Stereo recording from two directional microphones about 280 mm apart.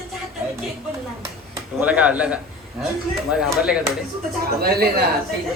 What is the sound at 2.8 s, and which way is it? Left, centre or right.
A man's voice, centre.